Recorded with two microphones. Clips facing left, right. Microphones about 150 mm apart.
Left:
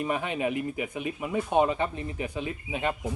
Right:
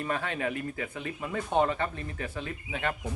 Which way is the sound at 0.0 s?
15° left (ahead or behind).